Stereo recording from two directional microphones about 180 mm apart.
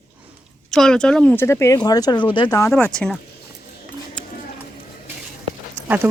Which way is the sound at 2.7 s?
5° left (ahead or behind).